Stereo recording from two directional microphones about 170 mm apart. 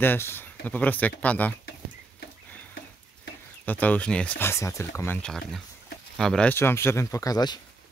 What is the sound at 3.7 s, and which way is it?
Speech, 10° left (ahead or behind).